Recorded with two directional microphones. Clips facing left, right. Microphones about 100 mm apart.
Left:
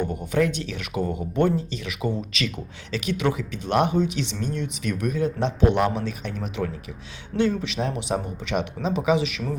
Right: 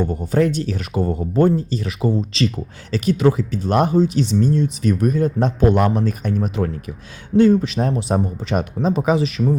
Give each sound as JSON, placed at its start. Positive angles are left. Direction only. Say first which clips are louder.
{"t": 0.1, "sound": "speech", "louder": "right 5 dB", "side_deg": -35}